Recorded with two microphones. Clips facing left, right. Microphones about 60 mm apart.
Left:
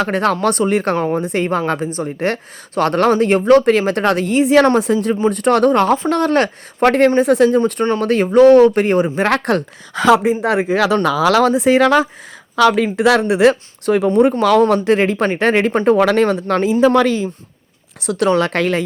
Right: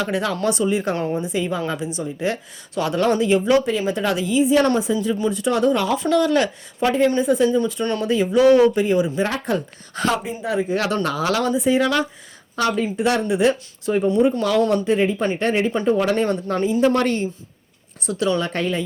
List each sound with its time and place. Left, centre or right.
0.0 s speech: left
8.0 s speech: left
9.2 s speech: left
18.0 s speech: left
18.3 s speech: left